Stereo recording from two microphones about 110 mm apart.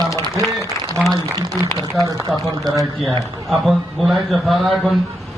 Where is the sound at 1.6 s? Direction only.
40° right (ahead or behind).